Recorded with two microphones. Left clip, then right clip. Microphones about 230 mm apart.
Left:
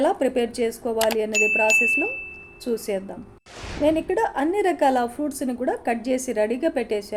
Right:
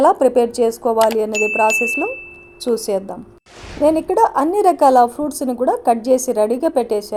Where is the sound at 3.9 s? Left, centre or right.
Right.